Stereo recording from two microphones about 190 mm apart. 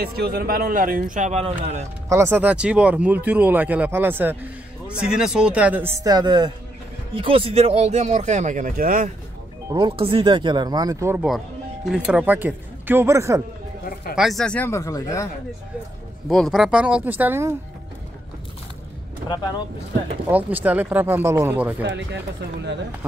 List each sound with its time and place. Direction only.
0.0 s speech: 55° right (ahead or behind)
2.0 s speech: 15° right (ahead or behind); by 9.1 s 45° right (ahead or behind)
9.7 s speech: 25° right (ahead or behind)
11.2 s speech: centre (ahead or behind)
14.1 s speech: centre (ahead or behind); by 15.2 s 15° left (ahead or behind)
16.3 s speech: centre (ahead or behind)
20.2 s speech: 10° right (ahead or behind)
21.8 s speech: 70° right (ahead or behind)